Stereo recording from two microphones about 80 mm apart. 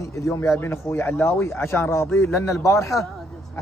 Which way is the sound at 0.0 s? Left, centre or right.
Left.